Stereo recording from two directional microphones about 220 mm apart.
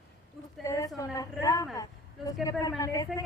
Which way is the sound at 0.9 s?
15° left (ahead or behind).